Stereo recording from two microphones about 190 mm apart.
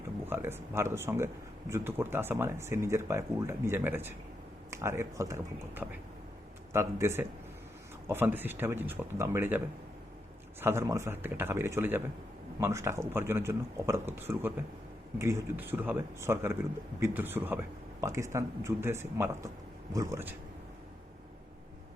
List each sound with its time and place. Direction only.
0.3 s speech: 10° right (ahead or behind)
10.6 s speech: 15° right (ahead or behind)